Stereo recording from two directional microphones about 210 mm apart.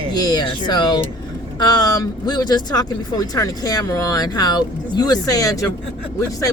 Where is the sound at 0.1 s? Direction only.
20° left (ahead or behind).